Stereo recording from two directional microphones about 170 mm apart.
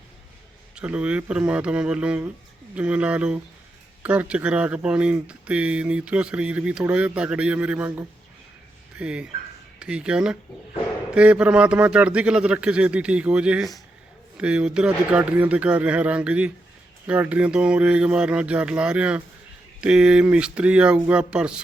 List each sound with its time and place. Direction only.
0.8 s speech: 5° right (ahead or behind)